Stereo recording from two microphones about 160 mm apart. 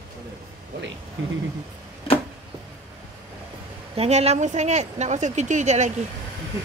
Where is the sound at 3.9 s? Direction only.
40° right (ahead or behind).